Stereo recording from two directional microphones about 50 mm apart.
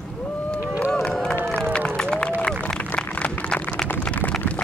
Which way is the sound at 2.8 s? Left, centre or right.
Left.